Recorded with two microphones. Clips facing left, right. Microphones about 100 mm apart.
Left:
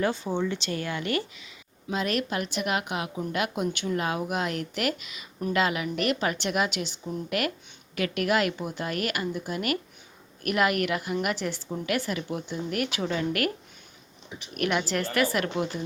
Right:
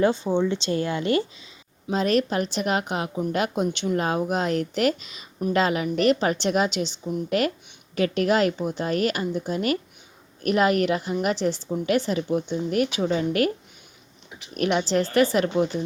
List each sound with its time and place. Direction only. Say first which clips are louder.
0.0 s a woman's voice: right 6 dB; 25° right (ahead or behind)
14.5 s a woman's voice: right 5 dB; 25° right (ahead or behind)